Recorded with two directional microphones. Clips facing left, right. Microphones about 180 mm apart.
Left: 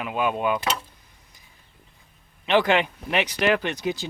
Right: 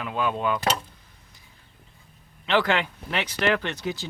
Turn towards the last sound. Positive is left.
turn(degrees=15)  # may be behind; listen again after turning